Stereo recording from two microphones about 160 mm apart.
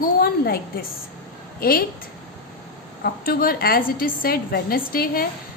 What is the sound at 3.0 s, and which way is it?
A woman's voice, 65° left (ahead or behind).